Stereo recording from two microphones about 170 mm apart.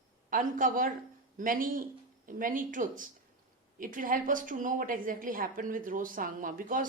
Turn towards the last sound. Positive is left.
turn(degrees=-55)  # may be behind; listen again after turning